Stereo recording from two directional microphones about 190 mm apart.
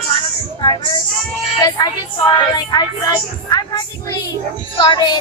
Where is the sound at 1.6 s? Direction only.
20° left (ahead or behind).